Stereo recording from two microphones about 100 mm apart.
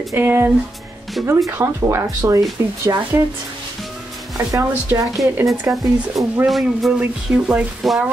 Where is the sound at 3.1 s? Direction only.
25° right (ahead or behind).